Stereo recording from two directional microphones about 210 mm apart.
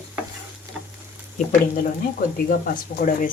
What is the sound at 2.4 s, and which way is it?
Speech, 40° left (ahead or behind).